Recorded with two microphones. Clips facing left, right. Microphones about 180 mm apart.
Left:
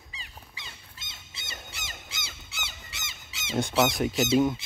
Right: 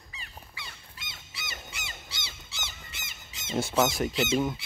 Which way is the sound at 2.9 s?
80° left.